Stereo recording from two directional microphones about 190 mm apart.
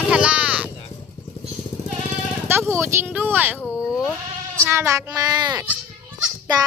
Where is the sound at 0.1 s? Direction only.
5° right (ahead or behind).